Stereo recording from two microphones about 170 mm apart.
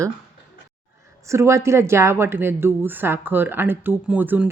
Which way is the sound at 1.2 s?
15° right (ahead or behind).